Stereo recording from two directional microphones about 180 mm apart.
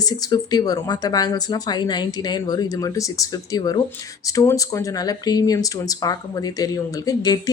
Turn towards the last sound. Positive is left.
turn(degrees=20)  # may be behind; listen again after turning